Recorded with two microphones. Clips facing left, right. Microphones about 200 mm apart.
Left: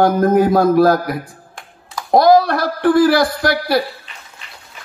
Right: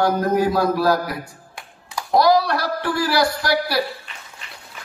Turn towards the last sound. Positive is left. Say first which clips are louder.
# left 4 dB
turn(degrees=50)  # may be behind; listen again after turning